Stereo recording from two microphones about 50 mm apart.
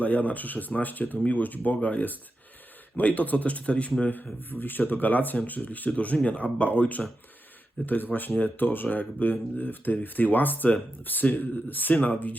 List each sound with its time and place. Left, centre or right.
0.0 s speech: left
4.1 s speech: left